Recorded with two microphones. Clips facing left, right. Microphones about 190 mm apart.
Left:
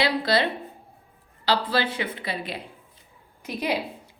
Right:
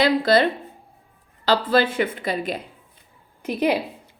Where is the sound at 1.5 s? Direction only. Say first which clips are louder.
Right 5 dB; 50° right (ahead or behind).